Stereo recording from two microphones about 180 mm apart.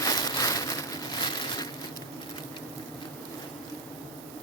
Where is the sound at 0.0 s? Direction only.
20° left (ahead or behind).